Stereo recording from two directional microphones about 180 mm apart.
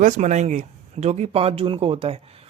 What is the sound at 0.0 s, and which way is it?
Speech, 40° right (ahead or behind).